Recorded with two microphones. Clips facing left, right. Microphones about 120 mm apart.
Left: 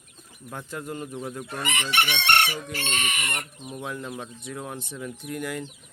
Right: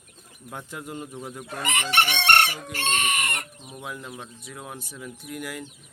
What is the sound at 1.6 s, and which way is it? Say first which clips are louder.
Chicken: right 3 dB; 40° right (ahead or behind).